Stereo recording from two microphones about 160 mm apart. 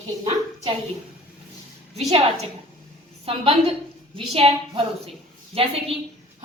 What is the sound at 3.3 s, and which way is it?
A woman's voice, 35° right (ahead or behind).